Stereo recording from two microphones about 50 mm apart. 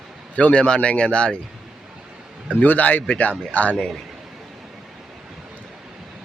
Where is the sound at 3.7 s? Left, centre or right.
Centre.